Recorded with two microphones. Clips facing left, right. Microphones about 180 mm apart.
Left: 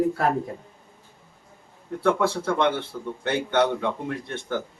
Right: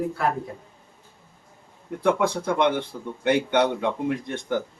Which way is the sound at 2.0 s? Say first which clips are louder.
Even; 15° right (ahead or behind).